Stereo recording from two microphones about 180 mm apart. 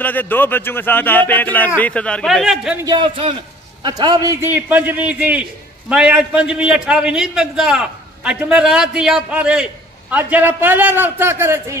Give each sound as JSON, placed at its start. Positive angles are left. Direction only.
{"t": 0.0, "sound": "a man's voice", "side_deg": 10}
{"t": 2.8, "sound": "a man's voice", "side_deg": -25}